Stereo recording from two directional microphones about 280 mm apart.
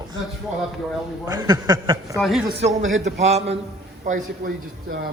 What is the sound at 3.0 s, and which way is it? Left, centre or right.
Speech, right.